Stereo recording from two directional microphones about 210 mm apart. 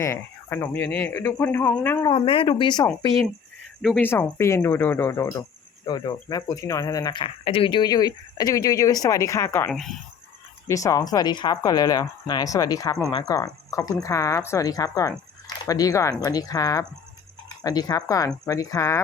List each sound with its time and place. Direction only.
0.0 s speech: 10° left (ahead or behind)
2.0 s speech: 25° left (ahead or behind)
3.8 s speech: 5° left (ahead or behind)